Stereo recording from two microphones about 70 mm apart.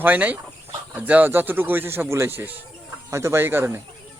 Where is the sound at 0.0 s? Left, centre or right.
Right.